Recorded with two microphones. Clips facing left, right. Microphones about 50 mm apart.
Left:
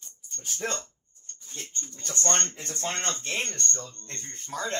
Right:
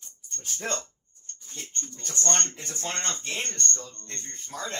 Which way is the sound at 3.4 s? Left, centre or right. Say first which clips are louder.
Even; right.